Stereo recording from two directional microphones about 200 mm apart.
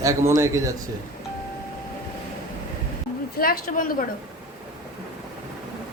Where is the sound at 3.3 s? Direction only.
45° left (ahead or behind).